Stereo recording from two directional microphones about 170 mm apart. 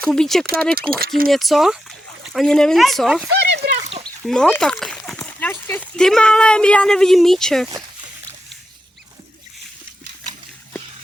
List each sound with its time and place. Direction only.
0.0 s speech: 5° left (ahead or behind)
0.8 s speech: 65° right (ahead or behind)
1.3 s speech: centre (ahead or behind)
3.3 s a sound: 75° right (ahead or behind)
4.0 s speech: 5° left (ahead or behind)